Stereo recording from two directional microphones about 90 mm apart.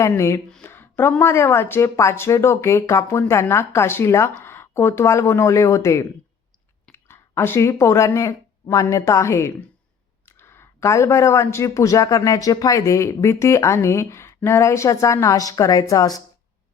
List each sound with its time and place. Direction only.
0.2 s speech: 35° left (ahead or behind)
0.6 s a sound: 25° left (ahead or behind)
1.2 s speech: 30° left (ahead or behind)